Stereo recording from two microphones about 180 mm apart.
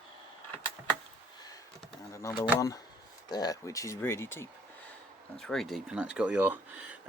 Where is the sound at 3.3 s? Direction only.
20° left (ahead or behind).